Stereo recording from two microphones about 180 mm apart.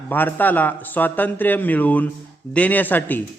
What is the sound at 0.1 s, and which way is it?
A man's voice, 10° left (ahead or behind).